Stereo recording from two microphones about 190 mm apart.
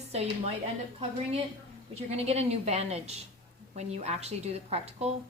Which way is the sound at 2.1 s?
35° right (ahead or behind).